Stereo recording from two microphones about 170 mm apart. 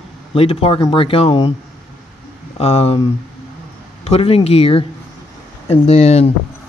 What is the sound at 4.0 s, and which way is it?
Speech, 35° left (ahead or behind).